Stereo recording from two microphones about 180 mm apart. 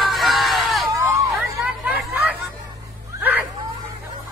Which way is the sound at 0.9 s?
20° right (ahead or behind).